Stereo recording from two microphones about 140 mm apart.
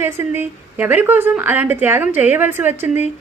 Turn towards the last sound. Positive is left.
turn(degrees=-15)  # may be behind; listen again after turning